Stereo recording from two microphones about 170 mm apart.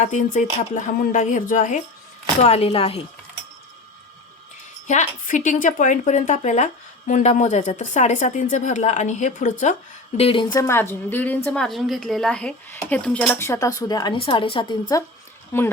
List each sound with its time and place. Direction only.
0.0 s speech: 45° left (ahead or behind)
2.4 s speech: 35° left (ahead or behind)
4.9 s speech: 45° left (ahead or behind)
10.2 s a woman's voice: 30° left (ahead or behind)
15.5 s a woman's voice: 15° left (ahead or behind)